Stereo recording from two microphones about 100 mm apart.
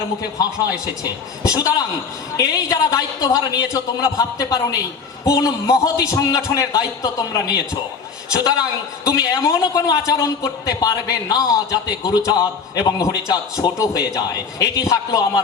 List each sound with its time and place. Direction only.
0.3 s a man's voice: 40° left (ahead or behind)
9.0 s a man's voice: 35° left (ahead or behind)